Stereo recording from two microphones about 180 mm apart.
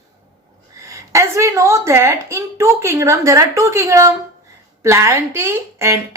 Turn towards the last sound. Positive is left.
turn(degrees=-15)  # may be behind; listen again after turning